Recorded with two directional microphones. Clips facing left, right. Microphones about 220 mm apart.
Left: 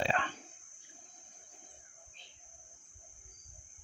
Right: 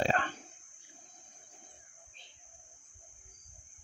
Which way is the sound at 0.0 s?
45° right (ahead or behind).